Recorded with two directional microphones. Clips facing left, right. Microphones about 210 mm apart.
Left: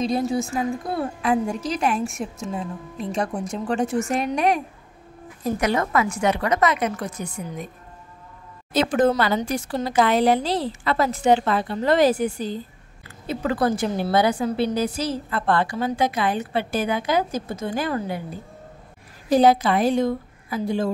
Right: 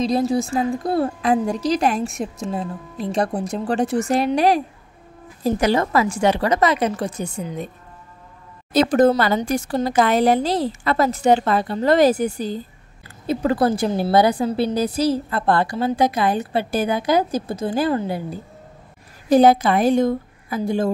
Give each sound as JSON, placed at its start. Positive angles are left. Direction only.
{"t": 0.0, "sound": "a woman's voice", "side_deg": -35}
{"t": 8.7, "sound": "a woman's voice", "side_deg": -40}
{"t": 19.3, "sound": "a woman's voice", "side_deg": -50}